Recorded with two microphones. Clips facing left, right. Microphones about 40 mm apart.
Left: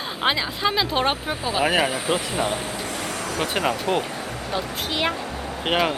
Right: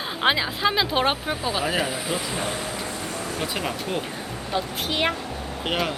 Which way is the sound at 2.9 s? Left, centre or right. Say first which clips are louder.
Left 3 dB; left.